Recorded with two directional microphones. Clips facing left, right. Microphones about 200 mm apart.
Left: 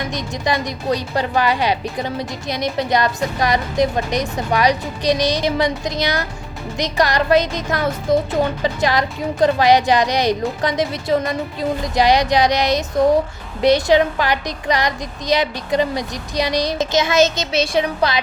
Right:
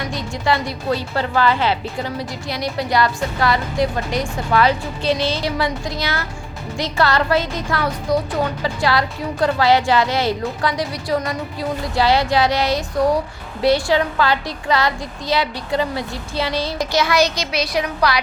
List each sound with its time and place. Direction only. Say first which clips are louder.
0.1 s a woman's voice: right 1 dB; 20° left (ahead or behind)